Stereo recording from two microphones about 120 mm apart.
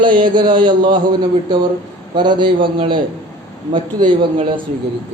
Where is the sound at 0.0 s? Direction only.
40° right (ahead or behind).